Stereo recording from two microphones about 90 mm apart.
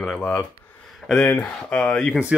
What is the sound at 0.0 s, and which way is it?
Speech, 10° left (ahead or behind).